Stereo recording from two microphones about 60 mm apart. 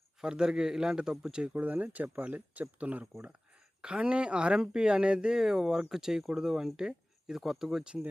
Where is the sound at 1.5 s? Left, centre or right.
Right; by 8.0 s centre.